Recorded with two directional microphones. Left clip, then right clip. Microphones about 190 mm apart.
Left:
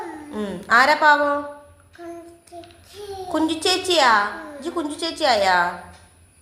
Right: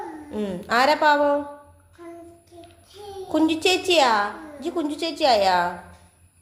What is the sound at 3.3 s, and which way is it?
A woman's voice, 20° right (ahead or behind).